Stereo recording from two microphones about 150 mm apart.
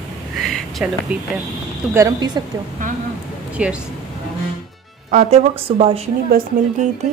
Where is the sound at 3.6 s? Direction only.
10° right (ahead or behind).